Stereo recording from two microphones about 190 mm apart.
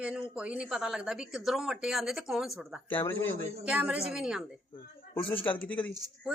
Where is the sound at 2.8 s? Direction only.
10° left (ahead or behind).